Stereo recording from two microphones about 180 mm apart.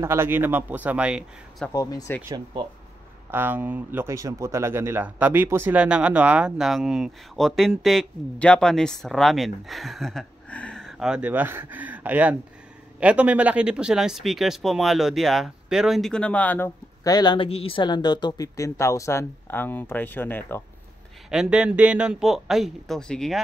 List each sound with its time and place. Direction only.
0.0 s speech: 15° right (ahead or behind)
1.7 s speech: 20° left (ahead or behind)
2.2 s speech: 20° right (ahead or behind)
3.3 s speech: 10° right (ahead or behind); by 20.6 s 10° left (ahead or behind)
21.3 s a man's voice: 5° right (ahead or behind)